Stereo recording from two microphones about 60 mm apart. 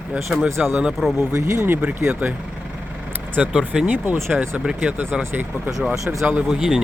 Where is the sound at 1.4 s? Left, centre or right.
Right.